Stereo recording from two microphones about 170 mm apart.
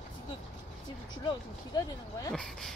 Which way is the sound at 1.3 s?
25° left (ahead or behind).